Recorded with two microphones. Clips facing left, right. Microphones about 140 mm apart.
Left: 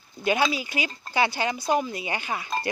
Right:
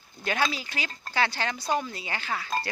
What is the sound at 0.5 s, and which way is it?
Speech, 10° left (ahead or behind).